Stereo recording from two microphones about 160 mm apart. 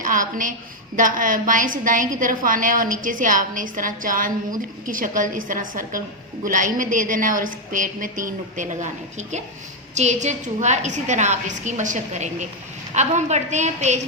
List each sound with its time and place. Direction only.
0.0 s a woman's voice: 55° right (ahead or behind)